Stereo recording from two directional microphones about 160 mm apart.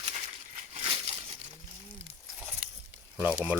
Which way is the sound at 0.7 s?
35° right (ahead or behind).